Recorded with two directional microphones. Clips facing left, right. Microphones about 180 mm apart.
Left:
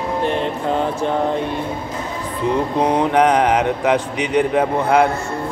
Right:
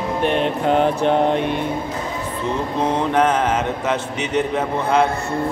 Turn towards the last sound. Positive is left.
turn(degrees=15)  # may be behind; listen again after turning